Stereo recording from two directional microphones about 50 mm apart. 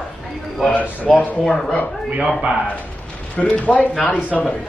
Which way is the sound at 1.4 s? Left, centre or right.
Centre.